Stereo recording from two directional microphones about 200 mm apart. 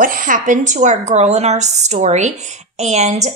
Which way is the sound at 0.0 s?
45° right (ahead or behind).